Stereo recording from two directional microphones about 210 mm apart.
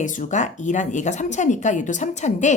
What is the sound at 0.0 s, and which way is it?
Speech, 35° left (ahead or behind).